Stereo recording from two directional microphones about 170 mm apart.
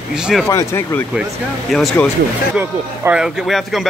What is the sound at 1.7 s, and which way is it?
Speech, centre (ahead or behind).